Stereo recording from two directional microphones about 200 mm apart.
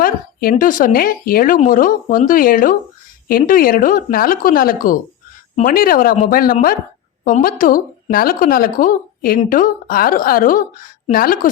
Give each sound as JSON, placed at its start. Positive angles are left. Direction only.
{"t": 0.0, "sound": "speech", "side_deg": 45}